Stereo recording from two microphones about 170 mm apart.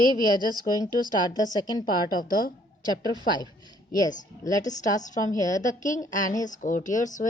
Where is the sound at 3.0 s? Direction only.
25° right (ahead or behind).